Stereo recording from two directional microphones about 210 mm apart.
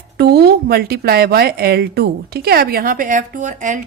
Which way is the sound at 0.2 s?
50° right (ahead or behind).